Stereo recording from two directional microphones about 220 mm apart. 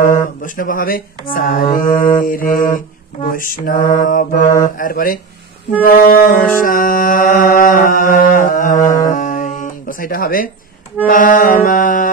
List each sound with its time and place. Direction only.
0.0 s mantra: 35° left (ahead or behind)
5.9 s music: 40° left (ahead or behind)
6.3 s music: 10° left (ahead or behind)
6.6 s mantra: 40° left (ahead or behind)